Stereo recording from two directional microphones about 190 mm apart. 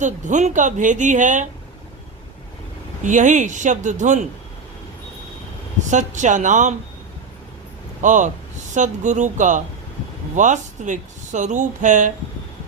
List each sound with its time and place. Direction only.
0.0 s speech: 40° right (ahead or behind)
3.0 s speech: 40° right (ahead or behind)
5.9 s speech: 40° right (ahead or behind)
8.0 s speech: 40° right (ahead or behind)